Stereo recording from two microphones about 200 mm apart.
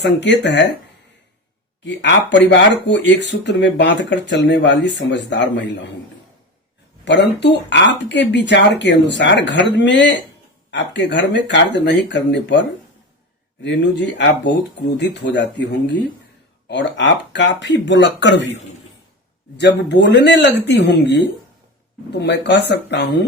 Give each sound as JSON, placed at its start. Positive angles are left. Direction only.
{"t": 0.0, "sound": "speech", "side_deg": 60}
{"t": 1.8, "sound": "speech", "side_deg": 60}
{"t": 7.0, "sound": "speech", "side_deg": 60}
{"t": 19.5, "sound": "speech", "side_deg": 60}